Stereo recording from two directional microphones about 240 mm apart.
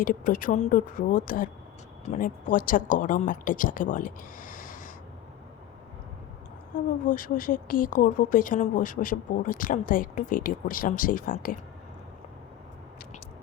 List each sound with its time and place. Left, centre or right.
0.0 s a woman's voice: left
6.7 s a woman's voice: left